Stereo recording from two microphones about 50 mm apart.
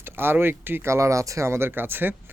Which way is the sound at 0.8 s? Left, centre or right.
Right.